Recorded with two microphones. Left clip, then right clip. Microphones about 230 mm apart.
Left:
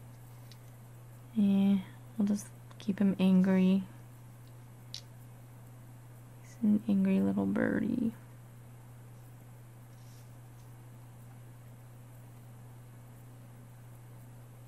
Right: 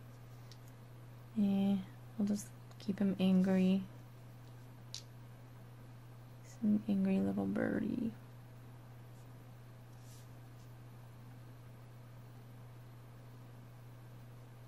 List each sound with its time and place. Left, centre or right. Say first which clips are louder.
1.4 s a sound: left 6 dB; left
2.8 s speech: left 5 dB; left
6.9 s speech: left 5 dB; left